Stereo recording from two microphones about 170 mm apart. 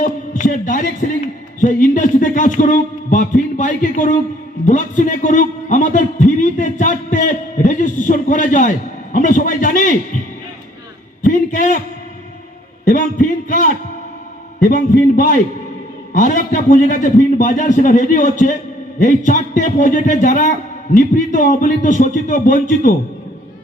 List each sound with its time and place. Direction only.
0.0 s a man's voice: 50° left (ahead or behind)
11.2 s a man's voice: 50° left (ahead or behind)
12.8 s a man's voice: 50° left (ahead or behind)